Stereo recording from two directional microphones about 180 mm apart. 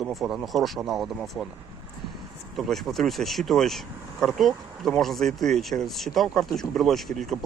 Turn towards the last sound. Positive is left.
turn(degrees=0)  # may be behind; listen again after turning